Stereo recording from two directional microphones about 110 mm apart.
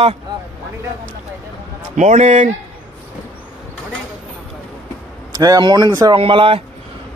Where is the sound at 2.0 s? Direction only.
90° right.